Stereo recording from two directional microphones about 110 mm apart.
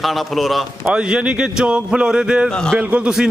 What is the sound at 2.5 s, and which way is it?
Speech, 10° left (ahead or behind).